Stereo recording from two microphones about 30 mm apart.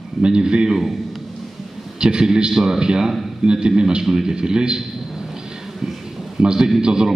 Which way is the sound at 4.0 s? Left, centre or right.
Centre.